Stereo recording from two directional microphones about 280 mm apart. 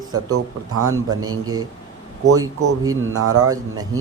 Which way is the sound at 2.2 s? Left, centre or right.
Right.